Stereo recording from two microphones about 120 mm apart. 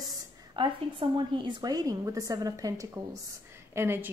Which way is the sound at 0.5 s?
40° right (ahead or behind).